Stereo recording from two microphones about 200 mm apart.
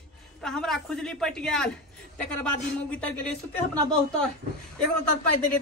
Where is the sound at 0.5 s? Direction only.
Centre (ahead or behind).